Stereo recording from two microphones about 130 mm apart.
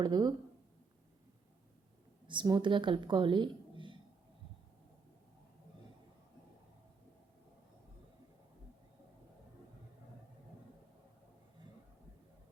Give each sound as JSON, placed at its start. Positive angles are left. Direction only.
{"t": 0.0, "sound": "speech", "side_deg": -35}
{"t": 2.2, "sound": "speech", "side_deg": -35}